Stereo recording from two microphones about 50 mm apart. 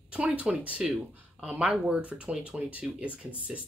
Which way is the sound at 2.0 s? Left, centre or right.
Right.